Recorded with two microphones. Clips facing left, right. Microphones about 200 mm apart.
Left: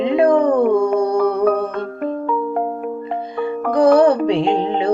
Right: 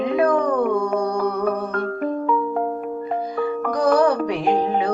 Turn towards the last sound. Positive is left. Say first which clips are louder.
# left 4 dB
turn(degrees=25)  # may be behind; listen again after turning